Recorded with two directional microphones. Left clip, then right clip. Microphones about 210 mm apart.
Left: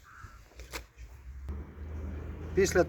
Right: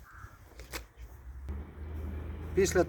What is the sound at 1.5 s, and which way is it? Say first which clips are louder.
Vehicle: left 1 dB; centre (ahead or behind).